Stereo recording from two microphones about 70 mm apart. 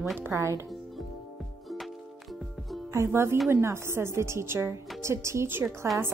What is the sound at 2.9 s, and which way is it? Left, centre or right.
A woman's voice, right.